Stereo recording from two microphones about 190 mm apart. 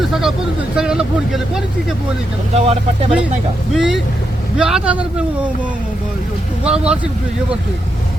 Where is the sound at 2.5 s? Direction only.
35° right (ahead or behind).